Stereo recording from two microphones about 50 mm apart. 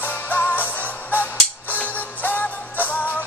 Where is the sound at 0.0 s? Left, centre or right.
Left.